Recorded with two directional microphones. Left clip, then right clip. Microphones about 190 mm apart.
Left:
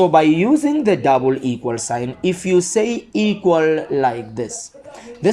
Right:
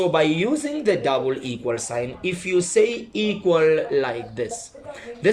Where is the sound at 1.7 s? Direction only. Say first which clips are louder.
Left 1 dB; 30° left (ahead or behind).